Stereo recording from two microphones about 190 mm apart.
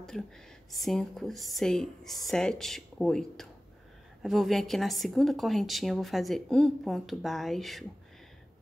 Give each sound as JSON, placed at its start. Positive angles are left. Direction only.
{"t": 0.1, "sound": "speech", "side_deg": 0}